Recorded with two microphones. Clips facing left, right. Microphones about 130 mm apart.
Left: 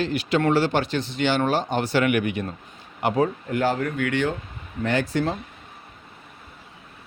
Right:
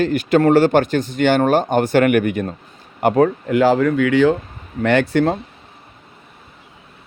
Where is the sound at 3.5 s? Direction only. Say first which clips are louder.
Right 9 dB; 90° right.